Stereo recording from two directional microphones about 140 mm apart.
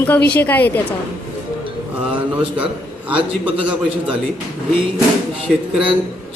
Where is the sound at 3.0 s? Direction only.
10° right (ahead or behind).